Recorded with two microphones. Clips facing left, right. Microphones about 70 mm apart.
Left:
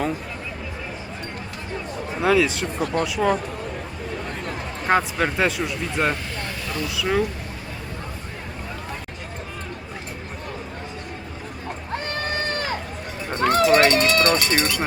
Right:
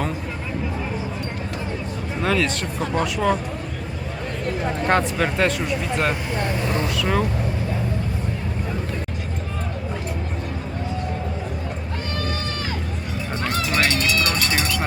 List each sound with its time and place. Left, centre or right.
2.2 s speech: centre
4.9 s speech: centre
13.4 s a sound: left
14.3 s speech: centre